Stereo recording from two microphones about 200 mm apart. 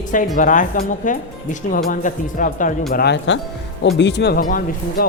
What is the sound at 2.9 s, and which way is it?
Speech, 55° left (ahead or behind).